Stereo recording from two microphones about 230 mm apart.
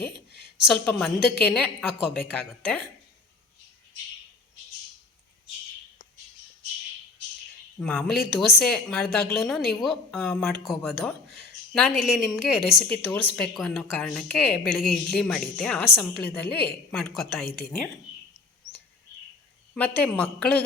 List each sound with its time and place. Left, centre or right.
0.6 s a woman's voice: centre
7.8 s a woman's voice: centre
20.0 s a woman's voice: centre